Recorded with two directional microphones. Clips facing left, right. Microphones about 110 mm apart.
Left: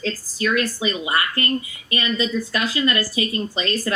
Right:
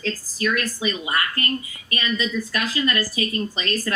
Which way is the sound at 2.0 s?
35° left (ahead or behind).